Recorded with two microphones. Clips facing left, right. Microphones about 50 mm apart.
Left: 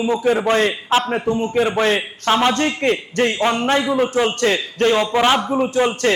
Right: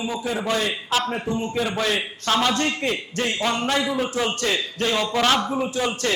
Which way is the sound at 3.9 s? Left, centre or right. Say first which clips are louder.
Left 6 dB; left.